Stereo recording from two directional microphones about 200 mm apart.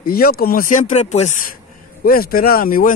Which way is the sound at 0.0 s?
50° left (ahead or behind).